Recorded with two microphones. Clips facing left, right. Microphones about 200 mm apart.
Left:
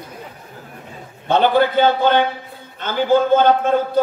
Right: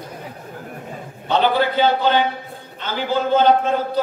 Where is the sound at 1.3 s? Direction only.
50° left (ahead or behind).